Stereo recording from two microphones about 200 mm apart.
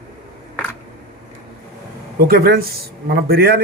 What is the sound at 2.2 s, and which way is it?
Speech, 50° right (ahead or behind).